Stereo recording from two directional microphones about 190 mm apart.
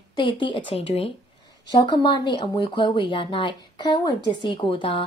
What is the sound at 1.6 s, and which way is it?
A woman's voice, 20° left (ahead or behind).